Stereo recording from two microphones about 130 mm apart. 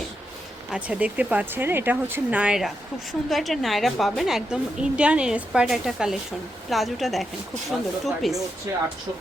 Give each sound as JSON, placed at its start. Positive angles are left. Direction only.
{"t": 0.7, "sound": "speech", "side_deg": -10}
{"t": 8.7, "sound": "speech", "side_deg": -25}